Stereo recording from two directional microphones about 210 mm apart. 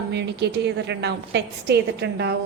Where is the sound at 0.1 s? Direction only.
55° right (ahead or behind).